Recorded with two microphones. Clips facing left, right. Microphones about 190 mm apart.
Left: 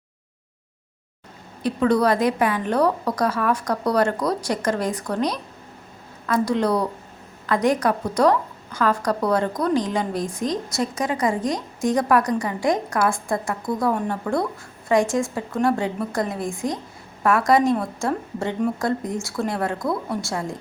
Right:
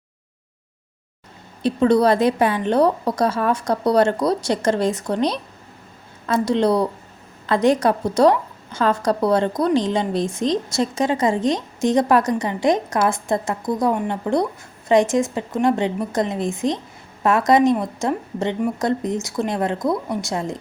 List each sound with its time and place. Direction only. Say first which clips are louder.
1.6 s a woman's voice: right 3 dB; 25° right (ahead or behind)